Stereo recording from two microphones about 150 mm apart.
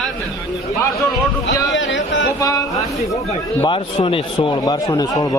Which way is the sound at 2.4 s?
25° left (ahead or behind).